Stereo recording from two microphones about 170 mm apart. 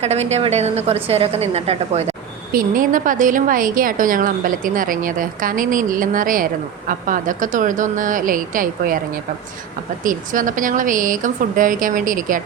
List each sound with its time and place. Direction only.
0.0 s a woman's voice: 40° right (ahead or behind)
2.5 s a woman's voice: 55° right (ahead or behind)
10.0 s a woman's voice: 50° right (ahead or behind)